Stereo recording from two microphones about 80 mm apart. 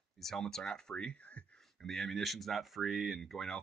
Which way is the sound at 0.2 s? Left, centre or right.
Centre.